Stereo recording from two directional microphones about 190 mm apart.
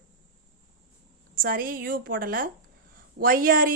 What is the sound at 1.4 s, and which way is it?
A woman's voice, 50° right (ahead or behind).